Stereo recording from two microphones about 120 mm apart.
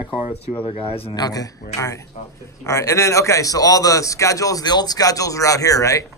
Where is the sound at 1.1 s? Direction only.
30° left (ahead or behind).